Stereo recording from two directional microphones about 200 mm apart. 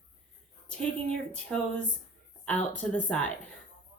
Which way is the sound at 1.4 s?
5° left (ahead or behind).